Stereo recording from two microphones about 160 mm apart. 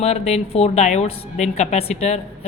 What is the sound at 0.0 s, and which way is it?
A woman's voice, 40° left (ahead or behind).